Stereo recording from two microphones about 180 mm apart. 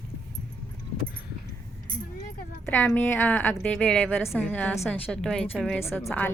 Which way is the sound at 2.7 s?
10° left (ahead or behind).